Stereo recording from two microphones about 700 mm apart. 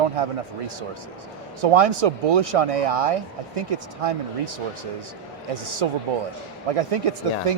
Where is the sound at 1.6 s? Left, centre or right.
Right.